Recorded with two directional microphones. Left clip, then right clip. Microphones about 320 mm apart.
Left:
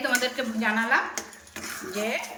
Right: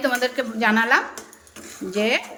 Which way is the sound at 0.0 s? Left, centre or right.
Right.